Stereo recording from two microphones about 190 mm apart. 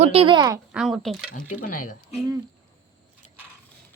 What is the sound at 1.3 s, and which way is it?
Speech, 45° left (ahead or behind).